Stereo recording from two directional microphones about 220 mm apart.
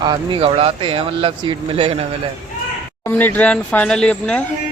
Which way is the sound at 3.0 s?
10° left (ahead or behind).